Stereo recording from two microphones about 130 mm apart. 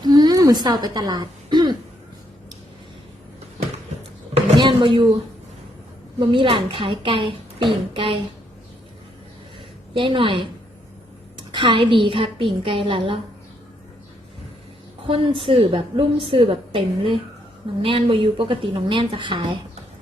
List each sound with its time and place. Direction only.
0.0 s a sound: 30° right (ahead or behind)
4.4 s a sound: 40° right (ahead or behind)
6.1 s a woman's voice: 40° right (ahead or behind)
9.9 s a woman's voice: 40° right (ahead or behind)
11.5 s a woman's voice: 40° right (ahead or behind)
15.0 s a woman's voice: 45° right (ahead or behind)